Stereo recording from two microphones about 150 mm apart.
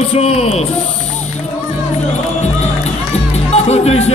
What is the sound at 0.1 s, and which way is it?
Speech, 40° left (ahead or behind).